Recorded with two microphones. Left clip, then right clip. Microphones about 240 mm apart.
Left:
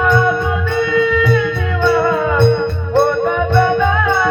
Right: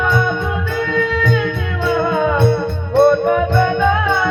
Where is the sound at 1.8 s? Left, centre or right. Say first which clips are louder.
Left 2 dB; left.